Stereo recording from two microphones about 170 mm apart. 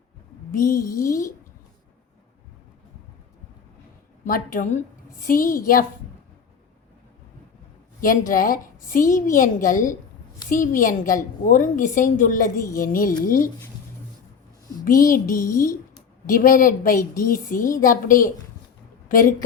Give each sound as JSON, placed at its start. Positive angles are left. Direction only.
{"t": 0.5, "sound": "a woman's voice", "side_deg": 55}
{"t": 4.3, "sound": "a woman's voice", "side_deg": 55}
{"t": 8.0, "sound": "a woman's voice", "side_deg": 55}
{"t": 14.8, "sound": "a woman's voice", "side_deg": 55}